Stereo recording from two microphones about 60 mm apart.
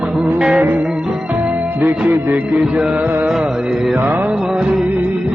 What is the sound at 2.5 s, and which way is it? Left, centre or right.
Music, right.